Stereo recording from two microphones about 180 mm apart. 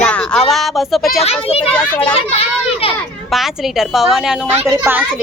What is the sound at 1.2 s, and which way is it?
A child's voice, 35° left (ahead or behind).